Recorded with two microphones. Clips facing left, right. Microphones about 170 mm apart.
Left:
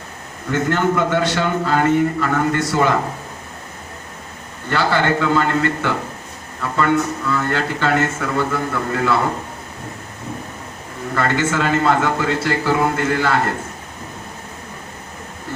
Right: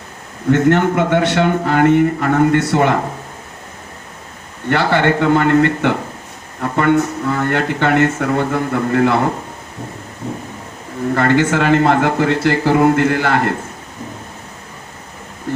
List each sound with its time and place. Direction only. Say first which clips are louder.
0.5 s speech: right 5 dB; 65° right (ahead or behind)
4.7 s speech: right 3 dB; 60° right (ahead or behind)
6.6 s speech: right 4 dB; 55° right (ahead or behind)
11.1 s speech: right 5 dB; 60° right (ahead or behind)